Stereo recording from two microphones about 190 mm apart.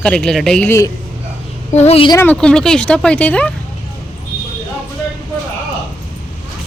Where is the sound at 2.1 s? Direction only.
5° left (ahead or behind).